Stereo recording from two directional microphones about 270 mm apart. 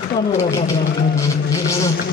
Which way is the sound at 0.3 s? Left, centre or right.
Centre.